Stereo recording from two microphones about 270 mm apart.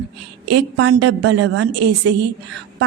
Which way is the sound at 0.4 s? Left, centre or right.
Right.